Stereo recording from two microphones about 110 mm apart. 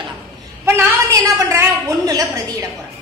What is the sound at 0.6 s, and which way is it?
A woman's voice, 25° right (ahead or behind).